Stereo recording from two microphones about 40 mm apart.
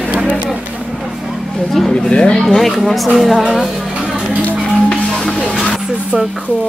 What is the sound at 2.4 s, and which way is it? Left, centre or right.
Speech, centre.